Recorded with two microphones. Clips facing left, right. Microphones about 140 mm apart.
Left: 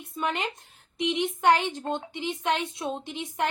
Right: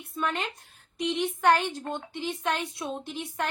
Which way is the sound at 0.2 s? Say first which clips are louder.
Left 1 dB; 15° left (ahead or behind).